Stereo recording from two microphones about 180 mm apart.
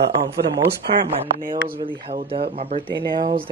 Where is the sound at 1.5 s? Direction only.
30° right (ahead or behind).